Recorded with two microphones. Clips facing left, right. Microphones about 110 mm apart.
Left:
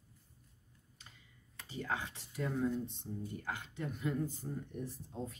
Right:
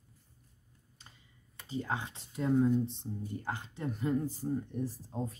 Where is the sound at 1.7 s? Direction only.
25° right (ahead or behind).